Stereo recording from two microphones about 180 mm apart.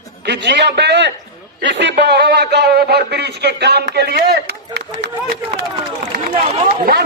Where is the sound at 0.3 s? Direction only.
70° right (ahead or behind).